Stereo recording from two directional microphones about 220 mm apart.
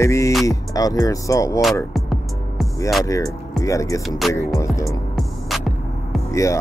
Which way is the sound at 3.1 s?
15° left (ahead or behind).